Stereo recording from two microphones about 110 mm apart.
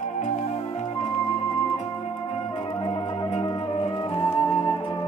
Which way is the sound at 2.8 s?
50° left (ahead or behind).